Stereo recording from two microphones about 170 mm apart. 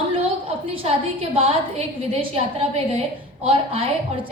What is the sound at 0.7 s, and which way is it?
A woman's voice, 35° right (ahead or behind).